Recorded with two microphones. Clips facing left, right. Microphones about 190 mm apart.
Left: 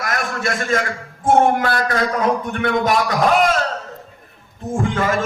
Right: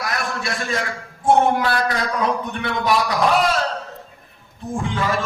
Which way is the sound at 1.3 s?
50° left (ahead or behind).